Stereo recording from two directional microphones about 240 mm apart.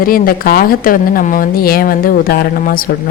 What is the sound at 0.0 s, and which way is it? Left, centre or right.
A woman's voice, left.